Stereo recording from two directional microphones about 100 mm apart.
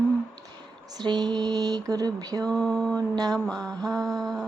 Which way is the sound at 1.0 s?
45° right (ahead or behind).